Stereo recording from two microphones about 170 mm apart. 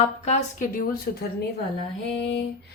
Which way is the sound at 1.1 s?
60° left (ahead or behind).